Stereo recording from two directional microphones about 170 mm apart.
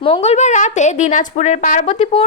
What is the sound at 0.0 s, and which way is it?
A woman's voice, 35° left (ahead or behind).